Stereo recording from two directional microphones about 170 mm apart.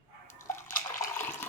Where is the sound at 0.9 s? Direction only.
15° left (ahead or behind).